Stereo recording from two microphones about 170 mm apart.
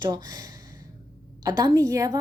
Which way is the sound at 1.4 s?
20° right (ahead or behind).